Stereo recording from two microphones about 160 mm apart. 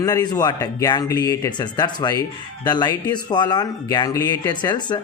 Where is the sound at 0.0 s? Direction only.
25° left (ahead or behind).